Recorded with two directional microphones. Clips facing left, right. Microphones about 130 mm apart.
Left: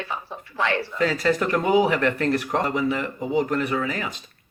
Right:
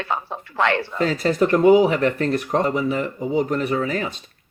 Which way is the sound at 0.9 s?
30° right (ahead or behind).